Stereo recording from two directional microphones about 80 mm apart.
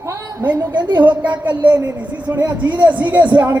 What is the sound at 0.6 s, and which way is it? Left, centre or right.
Speech, right.